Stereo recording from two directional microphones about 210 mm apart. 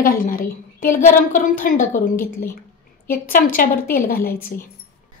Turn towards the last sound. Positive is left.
turn(degrees=45)  # may be behind; listen again after turning